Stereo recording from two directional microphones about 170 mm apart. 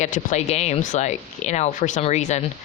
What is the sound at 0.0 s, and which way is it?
A woman's voice, 45° left (ahead or behind).